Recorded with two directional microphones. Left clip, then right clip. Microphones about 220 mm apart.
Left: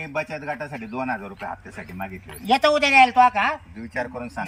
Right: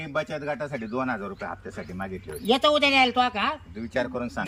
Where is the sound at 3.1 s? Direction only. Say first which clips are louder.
Left 7 dB; centre (ahead or behind).